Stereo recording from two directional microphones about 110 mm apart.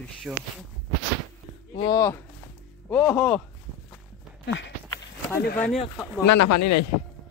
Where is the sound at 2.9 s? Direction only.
15° left (ahead or behind).